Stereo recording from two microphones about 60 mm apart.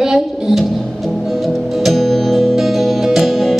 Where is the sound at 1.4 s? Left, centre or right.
Centre.